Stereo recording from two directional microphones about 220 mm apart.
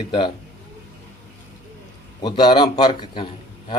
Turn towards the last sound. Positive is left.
turn(degrees=20)  # may be behind; listen again after turning